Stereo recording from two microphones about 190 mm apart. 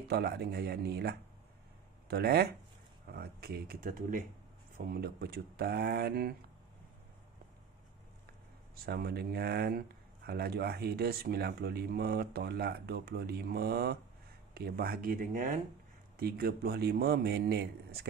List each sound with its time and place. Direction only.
0.1 s speech: 55° right (ahead or behind)
8.7 s speech: 55° right (ahead or behind)